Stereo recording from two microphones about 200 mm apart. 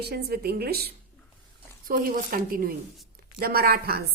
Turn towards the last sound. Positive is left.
turn(degrees=-50)  # may be behind; listen again after turning